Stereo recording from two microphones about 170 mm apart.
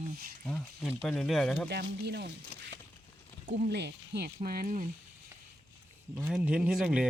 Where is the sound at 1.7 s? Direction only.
75° right (ahead or behind).